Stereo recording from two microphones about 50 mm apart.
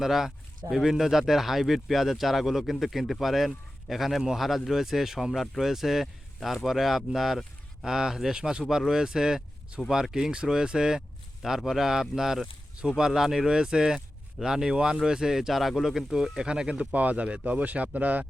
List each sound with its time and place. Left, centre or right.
0.0 s speech: centre
16.9 s speech: right